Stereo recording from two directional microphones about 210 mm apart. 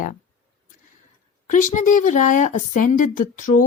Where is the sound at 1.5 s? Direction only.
35° left (ahead or behind).